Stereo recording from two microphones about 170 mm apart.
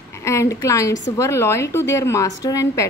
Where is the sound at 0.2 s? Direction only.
15° left (ahead or behind).